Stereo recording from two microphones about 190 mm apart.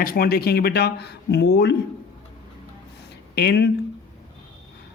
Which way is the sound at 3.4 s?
60° left (ahead or behind).